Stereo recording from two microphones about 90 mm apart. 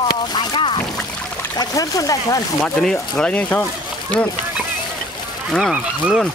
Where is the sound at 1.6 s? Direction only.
40° left (ahead or behind).